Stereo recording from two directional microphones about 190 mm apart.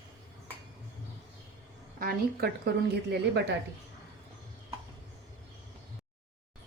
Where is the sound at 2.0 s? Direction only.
55° right (ahead or behind).